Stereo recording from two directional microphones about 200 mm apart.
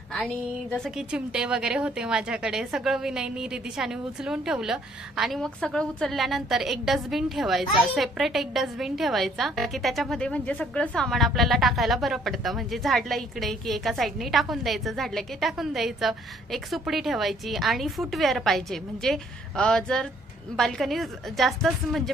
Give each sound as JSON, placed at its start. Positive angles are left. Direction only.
{"t": 0.1, "sound": "a woman's voice", "side_deg": 5}